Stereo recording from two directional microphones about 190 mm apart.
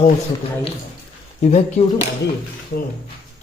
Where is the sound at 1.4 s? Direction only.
35° left (ahead or behind).